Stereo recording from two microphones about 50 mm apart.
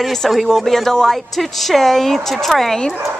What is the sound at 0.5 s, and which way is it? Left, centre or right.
Speech, centre.